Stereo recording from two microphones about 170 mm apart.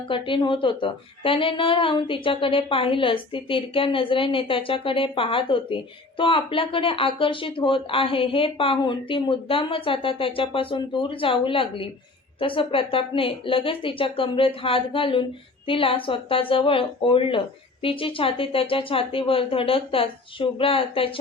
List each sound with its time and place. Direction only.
0.1 s a woman's voice: 30° left (ahead or behind)